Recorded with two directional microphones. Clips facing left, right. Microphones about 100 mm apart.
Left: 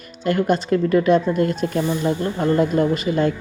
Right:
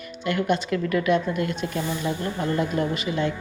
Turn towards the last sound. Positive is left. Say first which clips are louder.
# left 6 dB
turn(degrees=45)  # may be behind; listen again after turning